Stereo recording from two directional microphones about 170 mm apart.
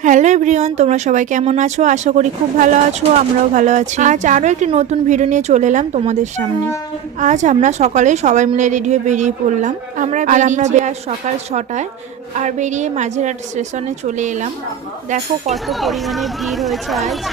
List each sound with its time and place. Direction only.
0.0 s speech: 45° right (ahead or behind)
15.6 s speech: centre (ahead or behind)